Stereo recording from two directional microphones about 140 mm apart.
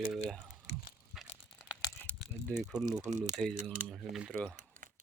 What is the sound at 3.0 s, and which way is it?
Speech, 60° right (ahead or behind).